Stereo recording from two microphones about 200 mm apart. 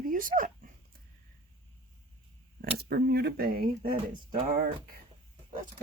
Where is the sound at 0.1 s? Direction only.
40° right (ahead or behind).